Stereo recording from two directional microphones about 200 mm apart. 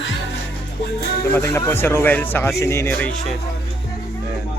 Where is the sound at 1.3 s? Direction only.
10° left (ahead or behind).